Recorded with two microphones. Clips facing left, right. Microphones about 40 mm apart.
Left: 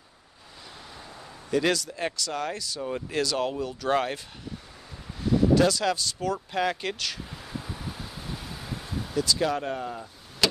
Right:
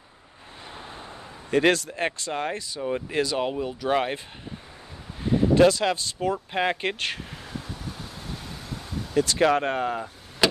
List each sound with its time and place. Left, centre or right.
1.5 s speech: right; by 4.2 s centre
5.2 s speech: right
7.6 s vehicle: centre
9.1 s speech: right
10.4 s a sound: centre